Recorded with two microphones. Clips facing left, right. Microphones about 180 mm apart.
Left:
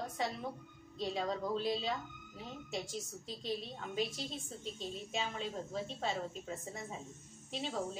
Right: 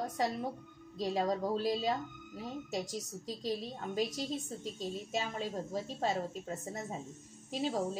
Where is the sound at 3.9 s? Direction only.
40° right (ahead or behind).